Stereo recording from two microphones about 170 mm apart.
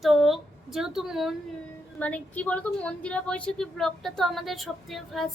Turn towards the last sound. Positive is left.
turn(degrees=0)  # may be behind; listen again after turning